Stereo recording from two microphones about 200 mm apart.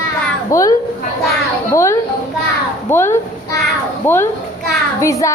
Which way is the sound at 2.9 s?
10° left (ahead or behind).